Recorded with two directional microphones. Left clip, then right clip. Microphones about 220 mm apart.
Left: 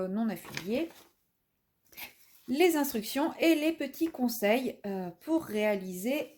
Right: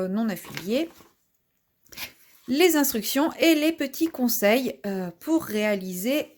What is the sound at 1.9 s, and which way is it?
Speech, 30° right (ahead or behind).